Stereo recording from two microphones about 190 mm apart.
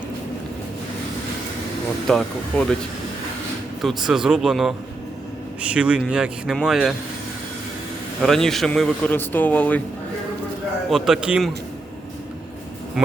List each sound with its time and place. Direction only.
2.0 s a man's voice: 5° left (ahead or behind)
3.8 s a man's voice: centre (ahead or behind)
8.2 s a man's voice: centre (ahead or behind)
10.8 s a man's voice: centre (ahead or behind)